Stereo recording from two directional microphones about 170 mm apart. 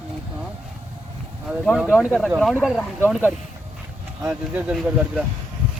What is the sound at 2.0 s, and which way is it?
Speech, centre (ahead or behind).